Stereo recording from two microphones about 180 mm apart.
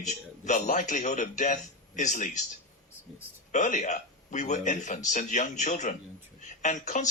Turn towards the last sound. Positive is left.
turn(degrees=45)  # may be behind; listen again after turning